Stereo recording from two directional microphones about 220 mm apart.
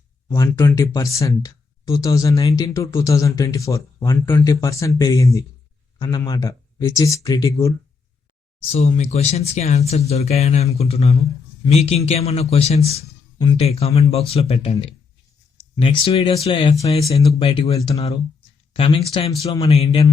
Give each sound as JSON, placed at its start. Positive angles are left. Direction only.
{"t": 0.3, "sound": "speech", "side_deg": 15}
{"t": 8.7, "sound": "a man's voice", "side_deg": 30}